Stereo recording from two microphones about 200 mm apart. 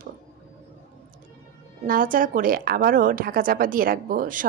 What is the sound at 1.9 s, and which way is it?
A woman's voice, 45° right (ahead or behind).